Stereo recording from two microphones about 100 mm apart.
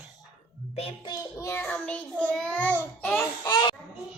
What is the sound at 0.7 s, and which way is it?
Music, 85° left.